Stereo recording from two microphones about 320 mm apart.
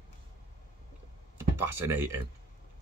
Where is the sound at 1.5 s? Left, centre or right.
Centre.